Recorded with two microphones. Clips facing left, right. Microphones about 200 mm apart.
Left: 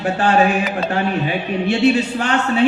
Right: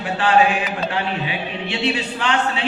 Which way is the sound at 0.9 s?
45° left (ahead or behind).